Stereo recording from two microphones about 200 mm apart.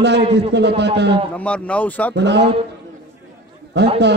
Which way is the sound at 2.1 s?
60° right (ahead or behind).